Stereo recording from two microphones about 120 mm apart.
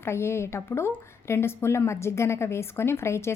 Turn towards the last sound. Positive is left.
turn(degrees=20)  # may be behind; listen again after turning